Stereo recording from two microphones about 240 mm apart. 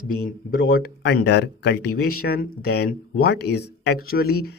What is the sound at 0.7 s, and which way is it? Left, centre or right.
Speech, left.